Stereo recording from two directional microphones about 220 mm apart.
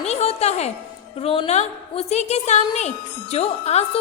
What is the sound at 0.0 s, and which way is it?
Music, 30° left (ahead or behind).